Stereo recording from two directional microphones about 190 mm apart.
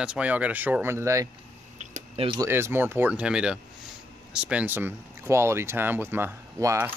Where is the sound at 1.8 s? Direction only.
40° right (ahead or behind).